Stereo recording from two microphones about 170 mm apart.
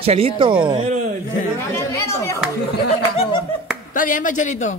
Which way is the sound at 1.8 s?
15° left (ahead or behind).